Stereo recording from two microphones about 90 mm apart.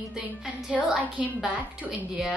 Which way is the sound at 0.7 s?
15° right (ahead or behind).